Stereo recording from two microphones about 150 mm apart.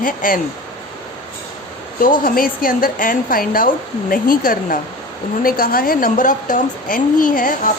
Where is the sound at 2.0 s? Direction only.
70° left (ahead or behind).